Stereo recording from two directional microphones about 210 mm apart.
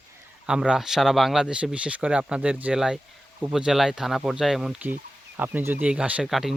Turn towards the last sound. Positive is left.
turn(degrees=0)  # may be behind; listen again after turning